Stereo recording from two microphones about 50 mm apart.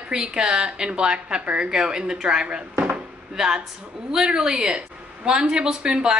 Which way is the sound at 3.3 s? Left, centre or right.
Centre.